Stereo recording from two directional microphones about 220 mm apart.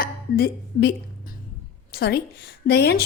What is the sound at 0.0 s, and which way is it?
A woman's voice, 45° left (ahead or behind).